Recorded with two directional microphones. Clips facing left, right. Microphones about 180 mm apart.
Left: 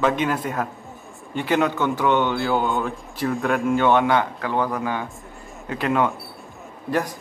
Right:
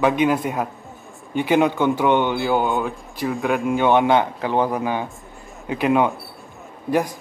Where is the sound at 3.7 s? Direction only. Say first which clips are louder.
Right 3 dB; 15° right (ahead or behind).